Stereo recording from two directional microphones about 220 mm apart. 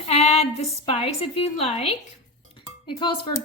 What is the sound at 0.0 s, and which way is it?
A woman's voice, 30° left (ahead or behind).